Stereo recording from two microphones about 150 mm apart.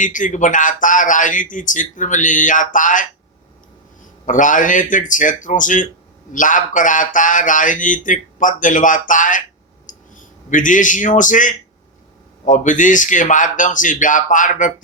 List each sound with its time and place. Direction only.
0.0 s speech: 60° left (ahead or behind)
4.3 s speech: 60° left (ahead or behind)
9.8 s a sound: 60° left (ahead or behind)
12.5 s speech: 60° left (ahead or behind)